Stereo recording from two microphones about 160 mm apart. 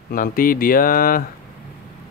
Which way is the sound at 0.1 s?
60° left (ahead or behind).